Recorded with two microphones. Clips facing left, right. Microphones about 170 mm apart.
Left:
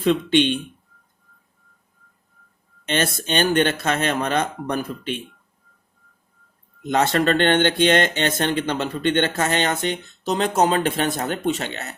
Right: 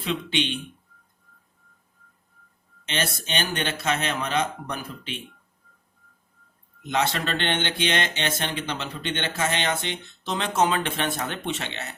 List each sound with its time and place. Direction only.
2.9 s speech: 50° left (ahead or behind)
6.8 s speech: 50° left (ahead or behind)